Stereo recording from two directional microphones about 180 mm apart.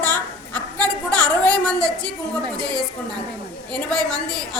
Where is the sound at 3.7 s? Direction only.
5° left (ahead or behind).